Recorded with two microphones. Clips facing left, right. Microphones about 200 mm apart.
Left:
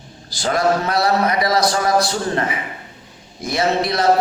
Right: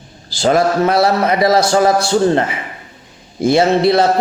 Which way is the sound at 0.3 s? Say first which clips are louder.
Right 4 dB; 25° right (ahead or behind).